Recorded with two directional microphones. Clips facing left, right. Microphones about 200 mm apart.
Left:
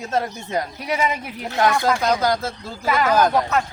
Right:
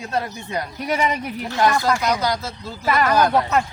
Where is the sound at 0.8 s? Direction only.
5° left (ahead or behind).